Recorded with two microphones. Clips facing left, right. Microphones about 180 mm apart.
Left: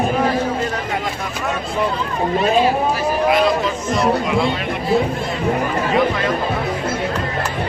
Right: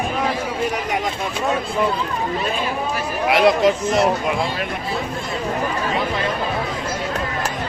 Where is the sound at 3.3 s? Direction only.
75° right (ahead or behind).